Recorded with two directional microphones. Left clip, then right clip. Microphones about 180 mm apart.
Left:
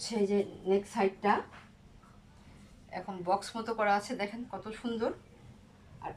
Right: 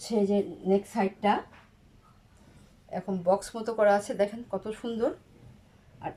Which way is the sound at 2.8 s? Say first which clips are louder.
Right 6 dB; 40° right (ahead or behind).